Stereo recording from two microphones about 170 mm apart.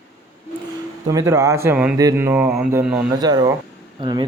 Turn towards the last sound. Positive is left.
turn(degrees=-25)  # may be behind; listen again after turning